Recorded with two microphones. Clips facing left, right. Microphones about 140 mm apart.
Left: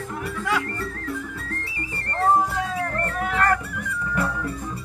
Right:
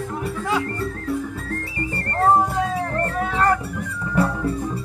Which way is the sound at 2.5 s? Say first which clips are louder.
Right 4 dB; 25° right (ahead or behind).